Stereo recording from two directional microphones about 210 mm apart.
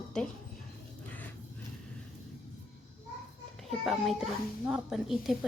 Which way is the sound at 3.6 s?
Centre (ahead or behind).